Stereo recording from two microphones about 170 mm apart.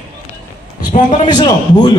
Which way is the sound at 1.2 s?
25° left (ahead or behind).